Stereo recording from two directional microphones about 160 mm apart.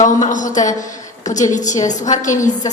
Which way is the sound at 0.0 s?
50° left (ahead or behind).